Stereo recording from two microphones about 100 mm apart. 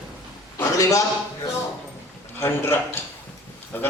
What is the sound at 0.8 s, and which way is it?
Speech, 35° left (ahead or behind).